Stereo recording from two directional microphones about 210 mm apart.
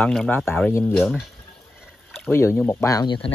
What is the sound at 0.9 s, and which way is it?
Speech, centre (ahead or behind).